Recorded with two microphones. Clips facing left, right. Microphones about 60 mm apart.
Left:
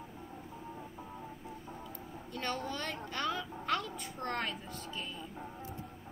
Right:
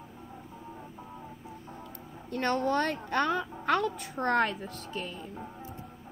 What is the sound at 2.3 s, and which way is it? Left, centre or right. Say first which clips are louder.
A woman's voice: right 10 dB; right.